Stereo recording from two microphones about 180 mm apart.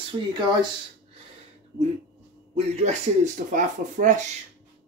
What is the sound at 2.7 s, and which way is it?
Speech, 40° right (ahead or behind).